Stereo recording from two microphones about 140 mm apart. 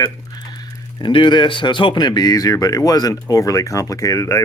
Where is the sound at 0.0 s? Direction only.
30° left (ahead or behind).